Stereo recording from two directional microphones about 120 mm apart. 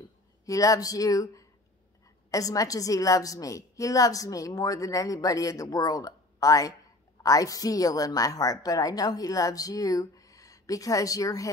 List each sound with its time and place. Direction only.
0.5 s a woman's voice: 30° left (ahead or behind)